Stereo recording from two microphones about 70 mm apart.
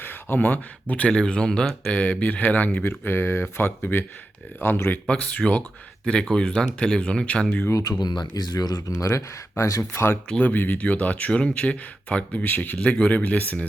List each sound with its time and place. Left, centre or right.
0.0 s speech: left
5.0 s speech: centre
7.7 s speech: left
7.9 s speech: left
9.9 s speech: left
10.2 s speech: centre